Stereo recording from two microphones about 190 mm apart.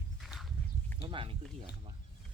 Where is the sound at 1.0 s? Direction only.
25° right (ahead or behind).